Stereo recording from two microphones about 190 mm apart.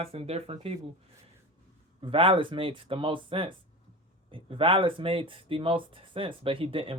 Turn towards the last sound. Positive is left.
turn(degrees=-30)  # may be behind; listen again after turning